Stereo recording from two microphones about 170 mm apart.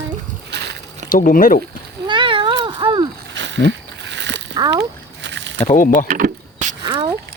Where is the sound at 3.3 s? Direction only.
90° right.